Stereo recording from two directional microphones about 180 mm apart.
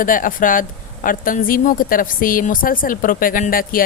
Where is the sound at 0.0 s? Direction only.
50° left (ahead or behind).